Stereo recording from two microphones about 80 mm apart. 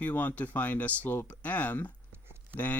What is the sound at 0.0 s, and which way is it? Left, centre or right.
Speech, left.